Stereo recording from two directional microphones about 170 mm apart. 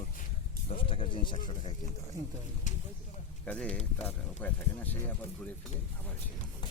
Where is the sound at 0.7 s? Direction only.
30° left (ahead or behind).